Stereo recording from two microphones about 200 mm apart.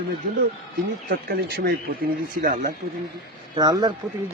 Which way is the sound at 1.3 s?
50° right (ahead or behind).